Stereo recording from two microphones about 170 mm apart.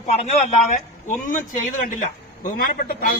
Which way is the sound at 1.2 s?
50° left (ahead or behind).